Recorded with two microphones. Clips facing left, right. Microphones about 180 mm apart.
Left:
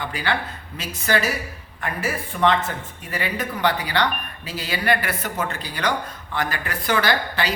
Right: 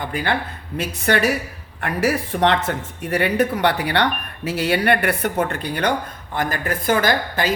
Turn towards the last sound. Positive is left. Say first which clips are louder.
# right 3 dB
turn(degrees=-45)  # may be behind; listen again after turning